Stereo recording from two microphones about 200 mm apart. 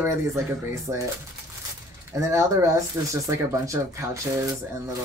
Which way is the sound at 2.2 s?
15° right (ahead or behind).